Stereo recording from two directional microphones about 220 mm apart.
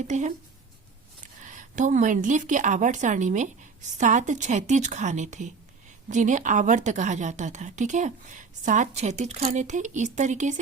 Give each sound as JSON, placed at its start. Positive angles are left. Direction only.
{"t": 0.1, "sound": "a woman's voice", "side_deg": -30}
{"t": 1.4, "sound": "a woman's voice", "side_deg": -35}